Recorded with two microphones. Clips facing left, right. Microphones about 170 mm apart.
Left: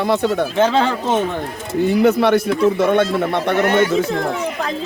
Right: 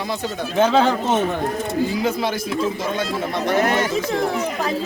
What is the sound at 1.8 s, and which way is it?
Speech, 65° left (ahead or behind).